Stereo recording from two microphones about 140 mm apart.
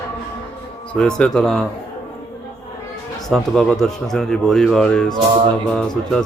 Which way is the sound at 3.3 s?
5° left (ahead or behind).